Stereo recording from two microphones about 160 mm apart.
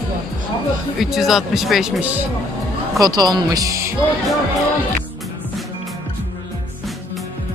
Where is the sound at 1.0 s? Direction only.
Centre (ahead or behind).